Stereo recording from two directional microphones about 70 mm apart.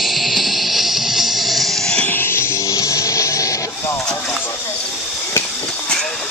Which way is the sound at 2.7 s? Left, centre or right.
Left.